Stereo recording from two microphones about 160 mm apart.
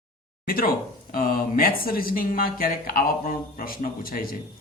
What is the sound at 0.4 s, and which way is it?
Speech, 65° left (ahead or behind).